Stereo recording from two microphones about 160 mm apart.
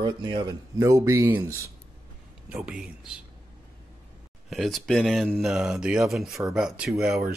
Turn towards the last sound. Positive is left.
turn(degrees=0)  # may be behind; listen again after turning